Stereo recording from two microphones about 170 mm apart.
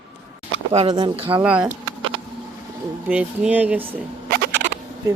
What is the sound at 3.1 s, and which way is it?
Speech, 10° right (ahead or behind).